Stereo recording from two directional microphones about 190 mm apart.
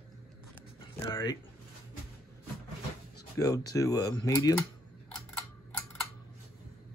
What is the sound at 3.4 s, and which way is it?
Speech, 20° left (ahead or behind).